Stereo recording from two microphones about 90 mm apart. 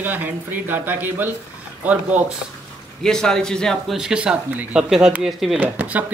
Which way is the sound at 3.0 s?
5° left (ahead or behind).